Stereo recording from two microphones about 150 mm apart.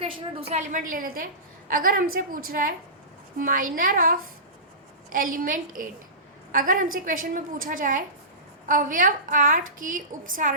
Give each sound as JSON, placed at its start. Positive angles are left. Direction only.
{"t": 0.0, "sound": "a woman's voice", "side_deg": -40}